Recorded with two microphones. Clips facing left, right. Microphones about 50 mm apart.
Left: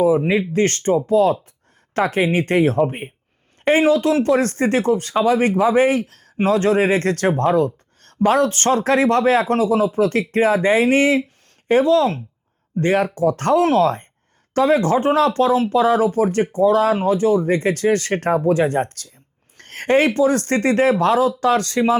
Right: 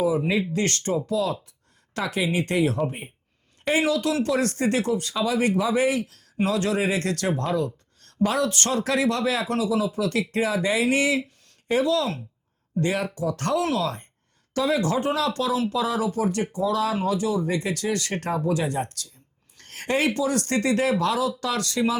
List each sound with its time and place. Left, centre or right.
0.2 s speech: left